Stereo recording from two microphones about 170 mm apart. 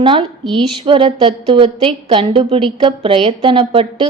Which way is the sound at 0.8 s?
30° right (ahead or behind).